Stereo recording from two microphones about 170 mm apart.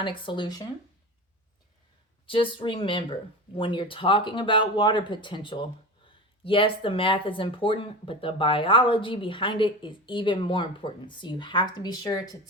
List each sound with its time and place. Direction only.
0.0 s speech: 30° left (ahead or behind)
2.2 s speech: 30° left (ahead or behind)